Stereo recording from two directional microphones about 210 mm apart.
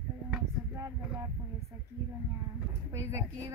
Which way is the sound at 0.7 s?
15° right (ahead or behind).